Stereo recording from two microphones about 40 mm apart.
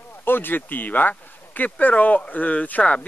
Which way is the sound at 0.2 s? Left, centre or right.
Left.